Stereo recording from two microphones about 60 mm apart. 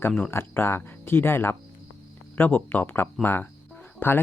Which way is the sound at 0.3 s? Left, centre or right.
Left.